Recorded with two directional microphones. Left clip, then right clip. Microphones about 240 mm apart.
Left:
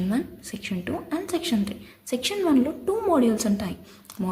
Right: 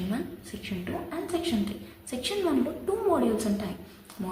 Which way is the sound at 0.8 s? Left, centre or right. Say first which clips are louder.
Left 4 dB; left.